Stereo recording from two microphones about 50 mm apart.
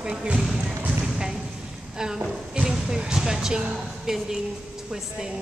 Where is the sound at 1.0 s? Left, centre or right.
Centre.